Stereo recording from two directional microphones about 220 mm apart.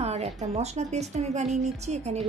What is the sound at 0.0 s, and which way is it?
A woman's voice, 30° right (ahead or behind).